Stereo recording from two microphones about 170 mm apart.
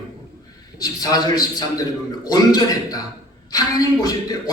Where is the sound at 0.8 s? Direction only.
20° left (ahead or behind).